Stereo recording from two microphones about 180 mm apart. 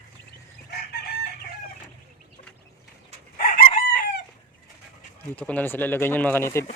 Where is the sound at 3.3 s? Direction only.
50° left (ahead or behind).